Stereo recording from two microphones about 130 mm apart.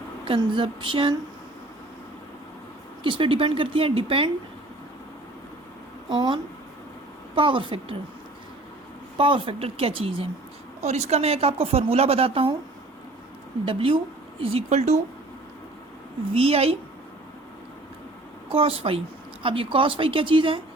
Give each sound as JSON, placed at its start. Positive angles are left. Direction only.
{"t": 0.3, "sound": "speech", "side_deg": -40}
{"t": 3.0, "sound": "speech", "side_deg": -40}
{"t": 6.1, "sound": "speech", "side_deg": -35}
{"t": 9.1, "sound": "speech", "side_deg": -40}
{"t": 10.8, "sound": "speech", "side_deg": -60}
{"t": 13.7, "sound": "speech", "side_deg": -45}
{"t": 16.3, "sound": "speech", "side_deg": -50}
{"t": 18.5, "sound": "speech", "side_deg": -45}